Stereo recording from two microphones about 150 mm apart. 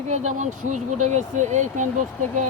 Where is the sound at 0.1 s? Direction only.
55° right (ahead or behind).